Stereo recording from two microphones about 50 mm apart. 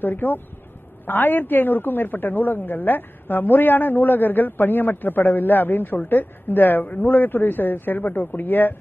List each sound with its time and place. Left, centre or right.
0.0 s speech: left